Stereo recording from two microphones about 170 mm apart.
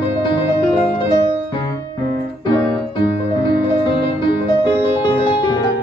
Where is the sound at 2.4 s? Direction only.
30° left (ahead or behind).